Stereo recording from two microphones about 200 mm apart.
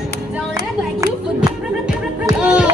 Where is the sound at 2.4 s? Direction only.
5° right (ahead or behind).